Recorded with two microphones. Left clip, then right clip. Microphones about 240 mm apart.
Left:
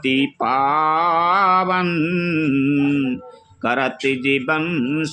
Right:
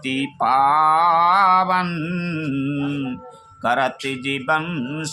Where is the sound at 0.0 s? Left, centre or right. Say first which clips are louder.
Left 2 dB; centre.